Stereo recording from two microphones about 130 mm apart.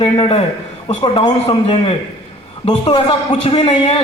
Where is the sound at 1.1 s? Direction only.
40° left (ahead or behind).